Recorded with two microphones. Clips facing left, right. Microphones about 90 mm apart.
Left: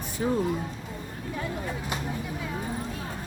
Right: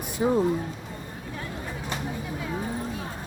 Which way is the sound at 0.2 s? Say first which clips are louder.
Right 4 dB; 15° right (ahead or behind).